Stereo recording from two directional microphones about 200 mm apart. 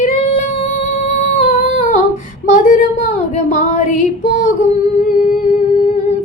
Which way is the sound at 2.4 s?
40° left (ahead or behind).